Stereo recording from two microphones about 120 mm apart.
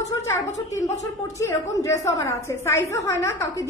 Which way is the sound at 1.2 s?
25° left (ahead or behind).